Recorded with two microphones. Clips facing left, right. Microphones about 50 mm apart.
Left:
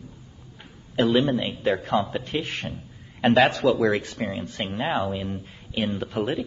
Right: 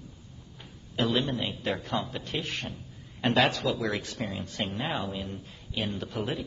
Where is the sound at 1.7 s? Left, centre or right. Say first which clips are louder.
Left 8 dB; centre.